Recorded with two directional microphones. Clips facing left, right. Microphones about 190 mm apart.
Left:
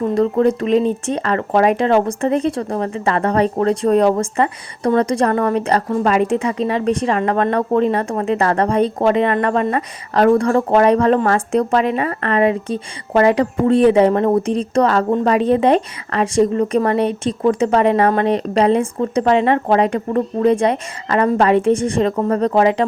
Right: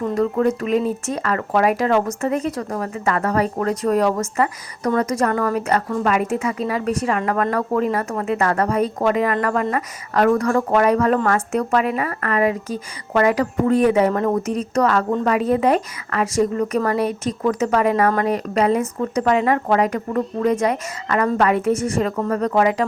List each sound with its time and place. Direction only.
0.1 s speech: 35° left (ahead or behind)